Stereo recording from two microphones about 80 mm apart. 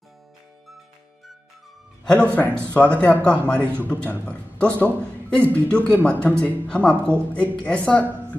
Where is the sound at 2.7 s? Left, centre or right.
Centre.